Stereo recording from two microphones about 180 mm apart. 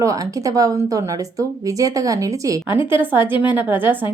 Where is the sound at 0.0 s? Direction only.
20° right (ahead or behind).